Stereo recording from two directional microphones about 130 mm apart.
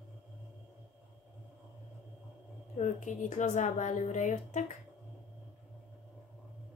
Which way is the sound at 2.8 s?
75° left (ahead or behind).